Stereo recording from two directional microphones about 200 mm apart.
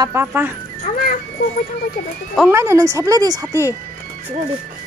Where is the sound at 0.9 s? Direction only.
35° left (ahead or behind).